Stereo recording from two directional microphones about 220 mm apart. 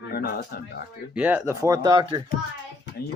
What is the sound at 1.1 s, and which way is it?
Speech, 5° right (ahead or behind).